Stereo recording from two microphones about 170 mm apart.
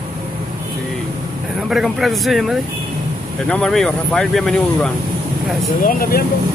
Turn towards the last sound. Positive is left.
turn(degrees=60)  # may be behind; listen again after turning